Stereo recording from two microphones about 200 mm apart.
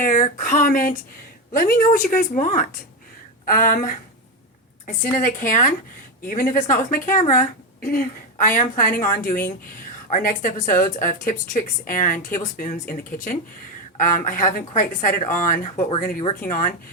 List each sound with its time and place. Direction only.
0.0 s a woman's voice: 40° left (ahead or behind)
5.1 s a woman's voice: 40° left (ahead or behind)